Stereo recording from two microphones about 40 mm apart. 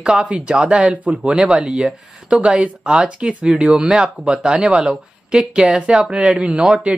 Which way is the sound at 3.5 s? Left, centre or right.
Centre.